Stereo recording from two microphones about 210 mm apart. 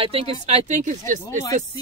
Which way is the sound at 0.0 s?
25° right (ahead or behind).